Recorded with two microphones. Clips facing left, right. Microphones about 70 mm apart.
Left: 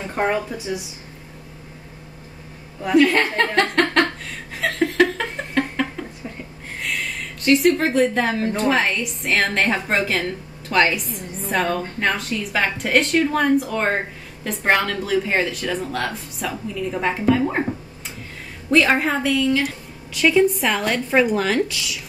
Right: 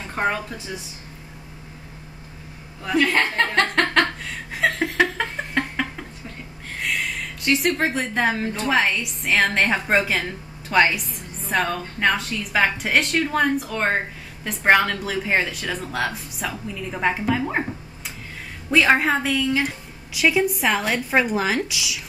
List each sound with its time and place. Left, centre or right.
0.1 s speech: centre
3.0 s a woman's voice: centre
4.5 s chuckle: centre
5.1 s a sound: centre
7.4 s a woman's voice: centre
18.7 s a woman's voice: centre